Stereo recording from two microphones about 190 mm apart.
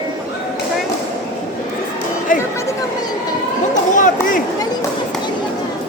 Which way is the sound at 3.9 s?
45° left (ahead or behind).